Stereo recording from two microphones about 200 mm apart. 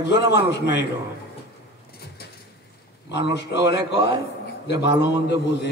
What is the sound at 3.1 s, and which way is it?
Speech, 60° left (ahead or behind).